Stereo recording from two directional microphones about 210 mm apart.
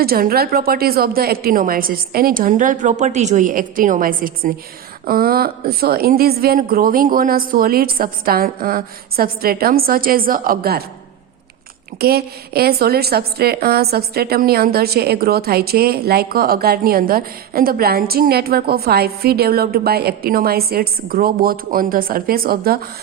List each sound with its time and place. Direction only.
0.0 s a woman's voice: 45° right (ahead or behind)
11.9 s a woman's voice: 50° right (ahead or behind)